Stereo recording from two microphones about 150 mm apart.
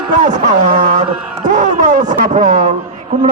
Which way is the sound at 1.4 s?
55° right (ahead or behind).